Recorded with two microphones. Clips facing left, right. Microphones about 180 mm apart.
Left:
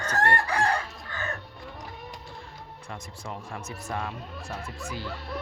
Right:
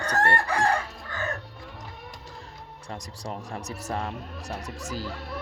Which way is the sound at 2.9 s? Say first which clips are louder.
Right 3 dB; 35° right (ahead or behind).